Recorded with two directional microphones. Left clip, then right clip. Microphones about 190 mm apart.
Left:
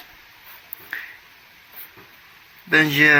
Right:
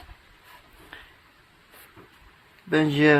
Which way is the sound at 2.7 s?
15° right (ahead or behind).